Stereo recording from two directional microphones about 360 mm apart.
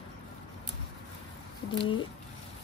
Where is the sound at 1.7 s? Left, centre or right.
Centre.